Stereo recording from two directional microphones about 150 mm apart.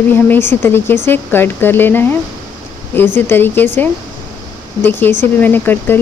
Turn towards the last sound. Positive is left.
turn(degrees=15)  # may be behind; listen again after turning